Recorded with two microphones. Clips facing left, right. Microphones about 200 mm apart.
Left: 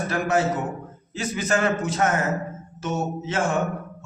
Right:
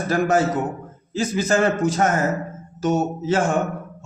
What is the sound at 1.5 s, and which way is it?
A man's voice, 40° right (ahead or behind).